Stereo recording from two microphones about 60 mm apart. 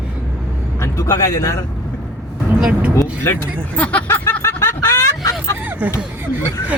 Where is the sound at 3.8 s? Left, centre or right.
Left.